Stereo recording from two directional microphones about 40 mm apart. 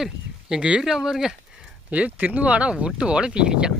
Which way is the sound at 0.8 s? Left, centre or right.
Centre.